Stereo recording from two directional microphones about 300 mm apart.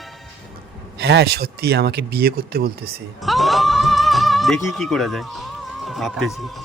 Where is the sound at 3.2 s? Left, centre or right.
Centre.